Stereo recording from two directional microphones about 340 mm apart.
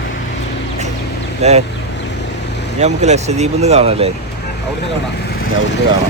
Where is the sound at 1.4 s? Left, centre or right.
Centre.